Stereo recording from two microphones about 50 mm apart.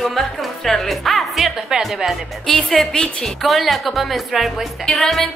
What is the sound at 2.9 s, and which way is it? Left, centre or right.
Speech, centre.